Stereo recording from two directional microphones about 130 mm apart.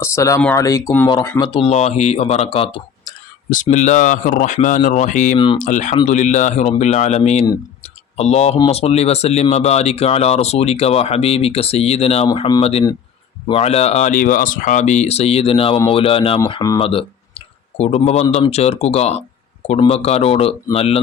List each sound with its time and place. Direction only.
0.0 s speech: 20° left (ahead or behind)
1.4 s speech: 40° left (ahead or behind)
1.7 s speech: 55° left (ahead or behind)
3.5 s speech: 70° left (ahead or behind); by 21.0 s 50° left (ahead or behind)